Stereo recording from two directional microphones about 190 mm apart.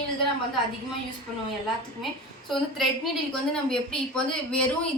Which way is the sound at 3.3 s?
5° left (ahead or behind).